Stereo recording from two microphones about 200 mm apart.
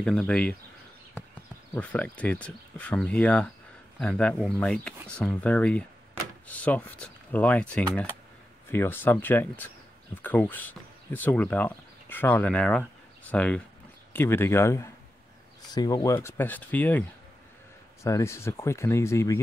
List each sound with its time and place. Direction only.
0.0 s speech: 5° left (ahead or behind)
1.7 s speech: 10° left (ahead or behind)
18.0 s speech: 15° left (ahead or behind)